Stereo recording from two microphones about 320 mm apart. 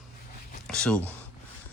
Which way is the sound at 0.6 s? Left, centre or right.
Centre.